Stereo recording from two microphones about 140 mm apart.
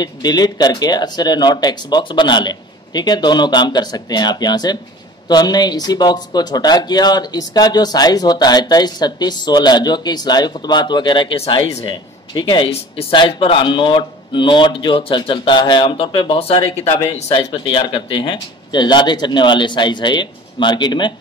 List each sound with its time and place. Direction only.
0.0 s speech: 30° left (ahead or behind)
16.6 s speech: 20° left (ahead or behind)
17.3 s speech: 40° left (ahead or behind)